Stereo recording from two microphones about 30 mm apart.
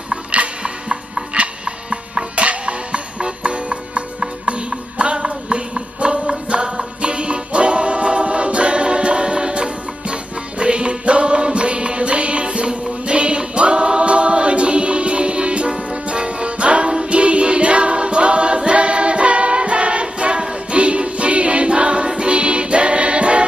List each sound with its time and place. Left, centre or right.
0.3 s music: right